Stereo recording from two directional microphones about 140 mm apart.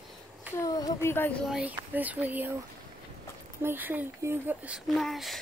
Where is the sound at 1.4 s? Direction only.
5° right (ahead or behind).